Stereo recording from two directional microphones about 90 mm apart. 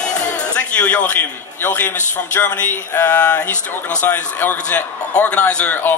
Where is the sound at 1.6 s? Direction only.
25° left (ahead or behind).